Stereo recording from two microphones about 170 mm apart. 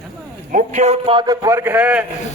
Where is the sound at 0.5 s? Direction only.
45° right (ahead or behind).